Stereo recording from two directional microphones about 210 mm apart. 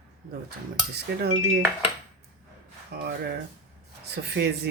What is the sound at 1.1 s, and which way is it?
Cutlery, 50° right (ahead or behind).